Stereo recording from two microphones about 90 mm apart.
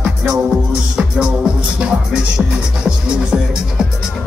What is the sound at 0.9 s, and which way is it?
Music, 10° right (ahead or behind).